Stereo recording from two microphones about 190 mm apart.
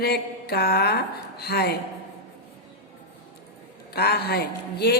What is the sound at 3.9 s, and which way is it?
A woman's voice, 55° left (ahead or behind).